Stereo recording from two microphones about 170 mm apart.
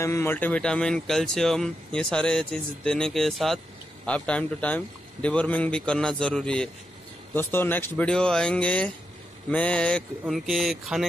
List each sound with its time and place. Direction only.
0.0 s speech: 15° left (ahead or behind); by 11.1 s centre (ahead or behind)